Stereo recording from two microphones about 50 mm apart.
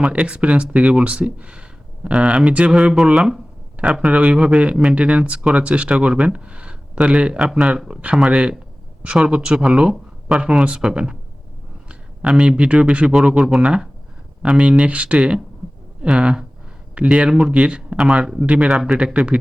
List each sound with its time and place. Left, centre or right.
0.0 s speech: right
3.2 s speech: centre
4.1 s speech: right
9.9 s a sound: centre
10.4 s speech: right
18.7 s speech: centre
18.9 s speech: centre